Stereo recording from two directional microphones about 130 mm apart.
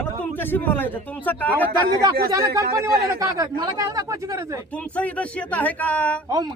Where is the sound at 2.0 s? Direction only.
25° right (ahead or behind).